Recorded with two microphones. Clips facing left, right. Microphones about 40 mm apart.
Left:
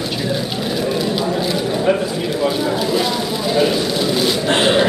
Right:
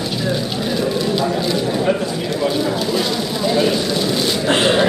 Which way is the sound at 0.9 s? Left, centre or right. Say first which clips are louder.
Even; centre.